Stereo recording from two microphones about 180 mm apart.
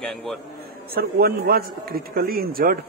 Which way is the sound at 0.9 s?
60° right (ahead or behind).